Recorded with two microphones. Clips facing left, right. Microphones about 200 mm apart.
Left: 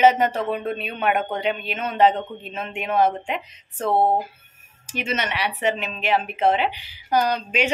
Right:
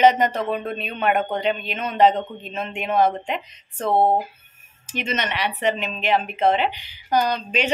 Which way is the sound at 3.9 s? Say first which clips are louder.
Right 1 dB; 15° right (ahead or behind).